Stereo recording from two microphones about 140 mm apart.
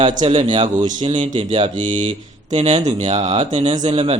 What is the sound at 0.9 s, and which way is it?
Speech, 35° right (ahead or behind).